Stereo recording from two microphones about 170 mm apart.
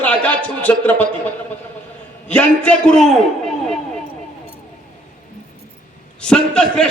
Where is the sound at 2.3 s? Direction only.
5° left (ahead or behind).